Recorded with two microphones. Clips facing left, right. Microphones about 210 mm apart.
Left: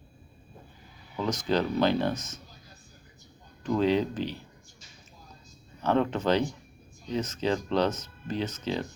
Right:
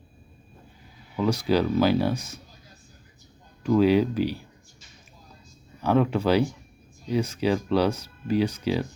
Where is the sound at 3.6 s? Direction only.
10° right (ahead or behind).